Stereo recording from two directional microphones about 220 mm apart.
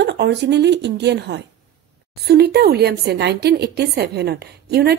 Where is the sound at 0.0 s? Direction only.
50° right (ahead or behind).